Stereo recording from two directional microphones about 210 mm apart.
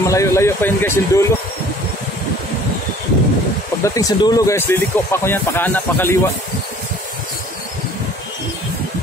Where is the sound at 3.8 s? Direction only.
15° left (ahead or behind).